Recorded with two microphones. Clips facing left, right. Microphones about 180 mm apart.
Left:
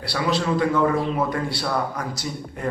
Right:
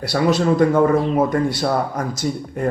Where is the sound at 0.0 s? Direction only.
45° right (ahead or behind).